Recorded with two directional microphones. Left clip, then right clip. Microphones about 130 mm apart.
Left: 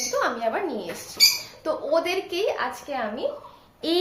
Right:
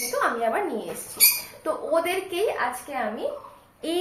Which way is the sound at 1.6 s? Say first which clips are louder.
Even; 20° left (ahead or behind).